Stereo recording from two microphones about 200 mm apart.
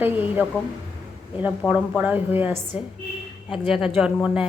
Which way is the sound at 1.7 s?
5° right (ahead or behind).